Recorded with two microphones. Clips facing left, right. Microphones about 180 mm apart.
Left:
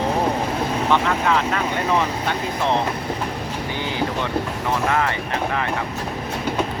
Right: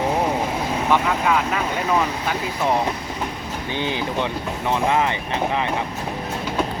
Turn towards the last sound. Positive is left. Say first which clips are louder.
# right 1 dB
turn(degrees=-20)  # may be behind; listen again after turning